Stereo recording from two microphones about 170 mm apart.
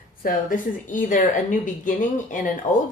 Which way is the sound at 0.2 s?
55° left (ahead or behind).